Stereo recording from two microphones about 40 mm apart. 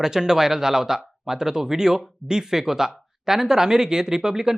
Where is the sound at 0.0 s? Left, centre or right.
Centre.